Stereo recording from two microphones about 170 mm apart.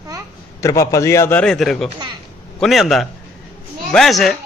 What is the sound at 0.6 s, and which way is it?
A man's voice, 20° left (ahead or behind).